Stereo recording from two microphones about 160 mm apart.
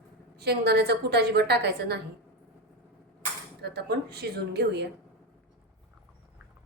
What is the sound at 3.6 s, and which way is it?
Speech, 90° right.